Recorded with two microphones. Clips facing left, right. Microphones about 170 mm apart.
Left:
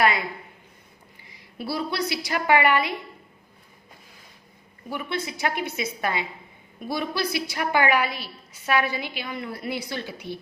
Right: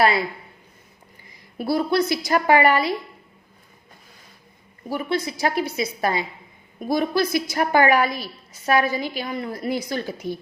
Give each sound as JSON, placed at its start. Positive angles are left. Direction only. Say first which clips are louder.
{"t": 0.0, "sound": "a woman's voice", "louder": "right 3 dB", "side_deg": -35}
{"t": 1.5, "sound": "a woman's voice", "louder": "right 7 dB", "side_deg": -50}
{"t": 4.9, "sound": "a woman's voice", "louder": "right 5 dB", "side_deg": -40}